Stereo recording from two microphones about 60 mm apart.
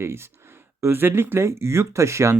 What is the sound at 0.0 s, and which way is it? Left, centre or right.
Speech, right.